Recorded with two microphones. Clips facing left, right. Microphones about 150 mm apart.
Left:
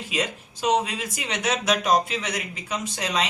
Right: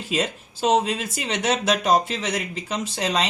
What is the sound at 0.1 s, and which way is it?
Speech, 30° right (ahead or behind).